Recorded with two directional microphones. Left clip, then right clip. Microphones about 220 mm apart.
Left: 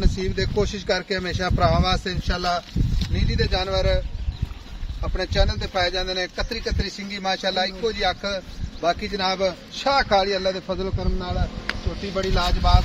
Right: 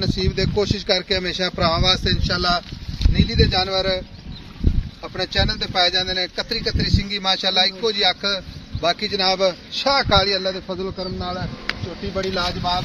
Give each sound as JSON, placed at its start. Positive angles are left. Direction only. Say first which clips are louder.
{"t": 0.0, "sound": "speech", "louder": "right 4 dB", "side_deg": -40}
{"t": 5.1, "sound": "speech", "louder": "right 3 dB", "side_deg": -40}
{"t": 10.7, "sound": "a man's voice", "louder": "right 1 dB", "side_deg": -5}
{"t": 12.4, "sound": "a man's voice", "louder": "even", "side_deg": 5}